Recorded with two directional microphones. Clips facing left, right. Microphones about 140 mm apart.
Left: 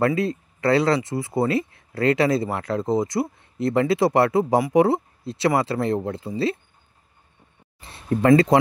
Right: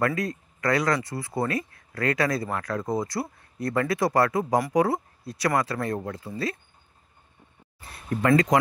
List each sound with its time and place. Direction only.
0.0 s speech: 25° left (ahead or behind)
7.9 s speech: 25° left (ahead or behind)